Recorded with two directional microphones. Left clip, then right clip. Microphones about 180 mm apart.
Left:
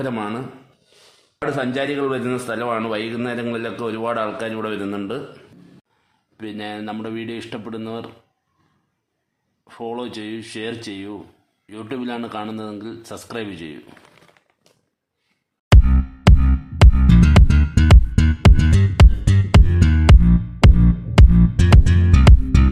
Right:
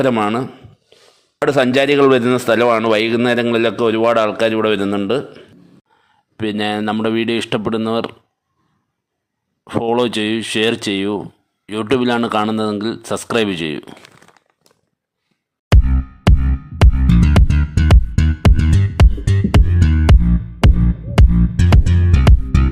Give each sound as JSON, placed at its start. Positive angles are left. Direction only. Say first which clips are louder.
{"t": 0.0, "sound": "a man's voice", "louder": "right 10 dB", "side_deg": -35}
{"t": 1.5, "sound": "a man's voice", "louder": "right 9 dB", "side_deg": -50}
{"t": 9.6, "sound": "speech", "louder": "right 12 dB", "side_deg": -45}
{"t": 15.7, "sound": "music", "louder": "even", "side_deg": 0}